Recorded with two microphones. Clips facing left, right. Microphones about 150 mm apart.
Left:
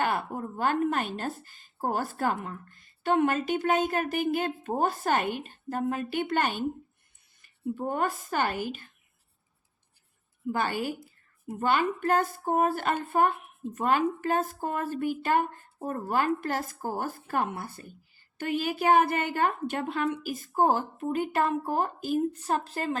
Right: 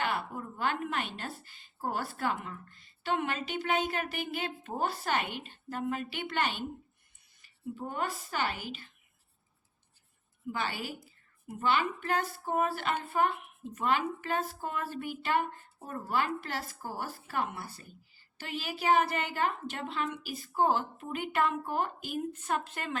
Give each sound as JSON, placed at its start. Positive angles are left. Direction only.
{"t": 0.0, "sound": "a woman's voice", "side_deg": 45}
{"t": 10.5, "sound": "a woman's voice", "side_deg": 45}